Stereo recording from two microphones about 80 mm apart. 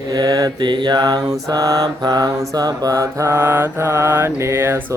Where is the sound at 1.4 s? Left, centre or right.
Right.